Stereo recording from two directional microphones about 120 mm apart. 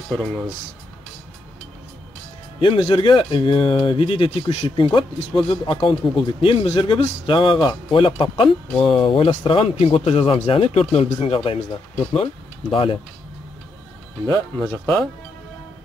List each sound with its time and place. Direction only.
0.1 s speech: 5° left (ahead or behind)
2.6 s speech: 45° left (ahead or behind)
12.7 s speech: 45° left (ahead or behind)
14.2 s speech: 20° left (ahead or behind)